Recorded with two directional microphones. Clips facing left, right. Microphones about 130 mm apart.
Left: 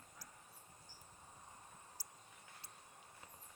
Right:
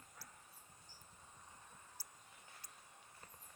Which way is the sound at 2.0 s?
10° left (ahead or behind).